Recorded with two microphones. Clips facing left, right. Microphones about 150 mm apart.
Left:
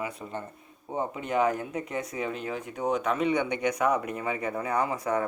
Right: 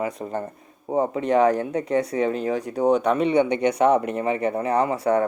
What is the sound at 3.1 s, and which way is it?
Speech, 65° right (ahead or behind).